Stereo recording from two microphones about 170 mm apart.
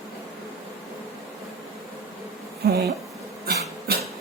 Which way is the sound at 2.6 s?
70° right (ahead or behind).